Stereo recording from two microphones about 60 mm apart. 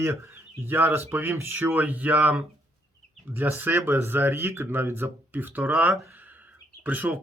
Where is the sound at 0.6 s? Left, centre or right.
Right.